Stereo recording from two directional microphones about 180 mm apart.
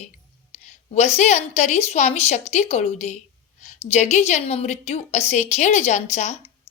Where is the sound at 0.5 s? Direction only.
40° left (ahead or behind).